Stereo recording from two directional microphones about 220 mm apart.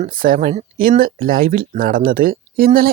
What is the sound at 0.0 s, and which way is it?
Speech, 40° right (ahead or behind).